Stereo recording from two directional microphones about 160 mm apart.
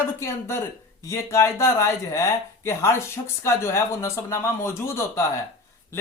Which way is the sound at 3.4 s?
15° left (ahead or behind).